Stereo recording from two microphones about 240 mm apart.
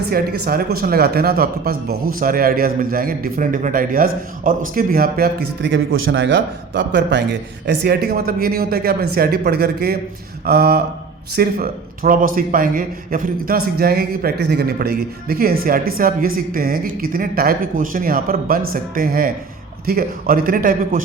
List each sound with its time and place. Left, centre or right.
0.1 s a man's voice: right